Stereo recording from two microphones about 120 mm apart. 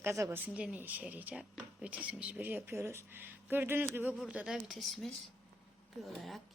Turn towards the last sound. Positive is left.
turn(degrees=0)  # may be behind; listen again after turning